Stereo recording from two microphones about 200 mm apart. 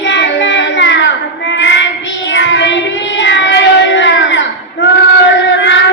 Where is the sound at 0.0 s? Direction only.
60° left (ahead or behind).